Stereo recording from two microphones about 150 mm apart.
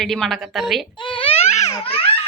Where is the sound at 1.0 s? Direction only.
35° left (ahead or behind).